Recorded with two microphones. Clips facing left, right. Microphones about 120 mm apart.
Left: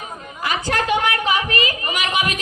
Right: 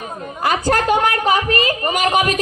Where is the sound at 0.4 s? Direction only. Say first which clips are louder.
Right 5 dB; 45° right (ahead or behind).